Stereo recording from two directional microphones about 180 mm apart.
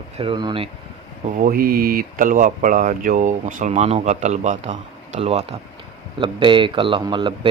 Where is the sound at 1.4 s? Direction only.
55° right (ahead or behind).